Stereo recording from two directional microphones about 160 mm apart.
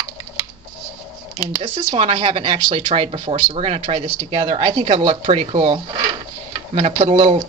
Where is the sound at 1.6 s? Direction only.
40° right (ahead or behind).